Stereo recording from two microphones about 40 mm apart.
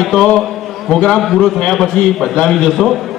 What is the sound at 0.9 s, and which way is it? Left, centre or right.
Speech, centre.